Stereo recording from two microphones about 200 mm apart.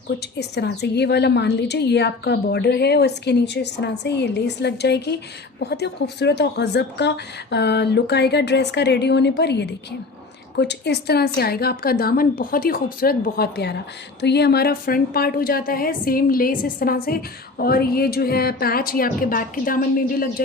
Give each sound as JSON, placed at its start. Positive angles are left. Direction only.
{"t": 0.2, "sound": "a woman's voice", "side_deg": 55}